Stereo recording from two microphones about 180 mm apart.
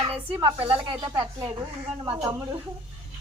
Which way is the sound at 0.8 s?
20° right (ahead or behind).